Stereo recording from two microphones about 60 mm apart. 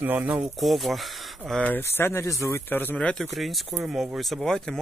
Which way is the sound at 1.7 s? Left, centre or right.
Left.